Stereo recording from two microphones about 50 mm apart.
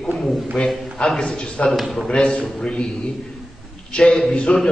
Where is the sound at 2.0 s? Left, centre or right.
Centre.